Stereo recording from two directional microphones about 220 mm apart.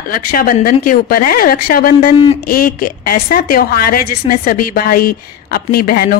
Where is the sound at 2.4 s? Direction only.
40° left (ahead or behind).